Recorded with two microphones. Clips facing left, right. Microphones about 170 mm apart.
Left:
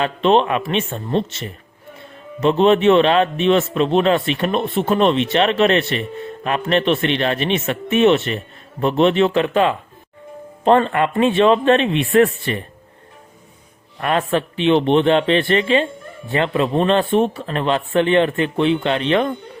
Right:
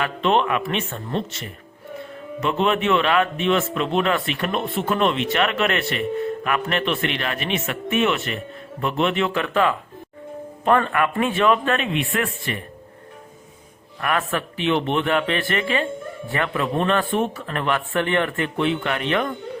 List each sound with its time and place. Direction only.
0.0 s a man's voice: 25° left (ahead or behind)
14.0 s a man's voice: 25° left (ahead or behind)